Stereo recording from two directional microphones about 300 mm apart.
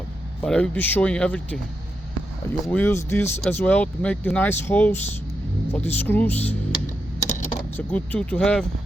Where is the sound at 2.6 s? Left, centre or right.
Centre.